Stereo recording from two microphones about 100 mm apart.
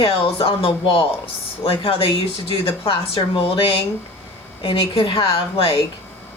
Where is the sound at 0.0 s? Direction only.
70° left (ahead or behind).